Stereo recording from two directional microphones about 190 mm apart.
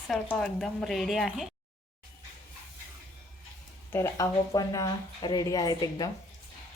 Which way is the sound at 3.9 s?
15° left (ahead or behind).